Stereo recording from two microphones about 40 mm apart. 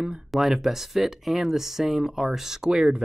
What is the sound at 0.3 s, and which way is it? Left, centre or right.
Speech, centre.